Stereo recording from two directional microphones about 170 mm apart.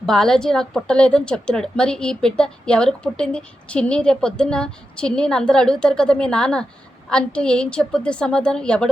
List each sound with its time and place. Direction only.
0.0 s a woman's voice: centre (ahead or behind)